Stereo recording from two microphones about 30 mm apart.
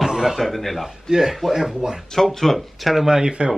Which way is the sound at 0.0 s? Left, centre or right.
Centre.